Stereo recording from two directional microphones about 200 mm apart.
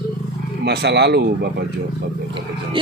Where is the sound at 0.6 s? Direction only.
55° right (ahead or behind).